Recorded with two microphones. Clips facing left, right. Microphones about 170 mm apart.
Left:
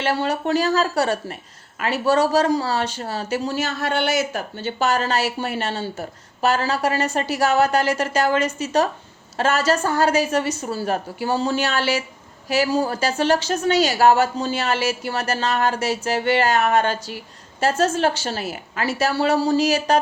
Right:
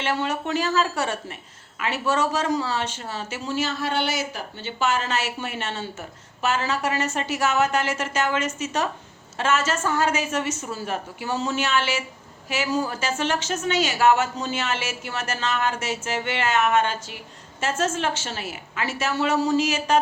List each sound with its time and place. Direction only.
0.0 s speech: 35° left (ahead or behind)